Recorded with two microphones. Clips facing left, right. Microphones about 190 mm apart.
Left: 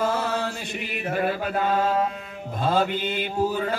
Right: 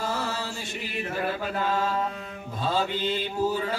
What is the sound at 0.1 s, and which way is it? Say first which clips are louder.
Chant: left 5 dB; 60° left (ahead or behind).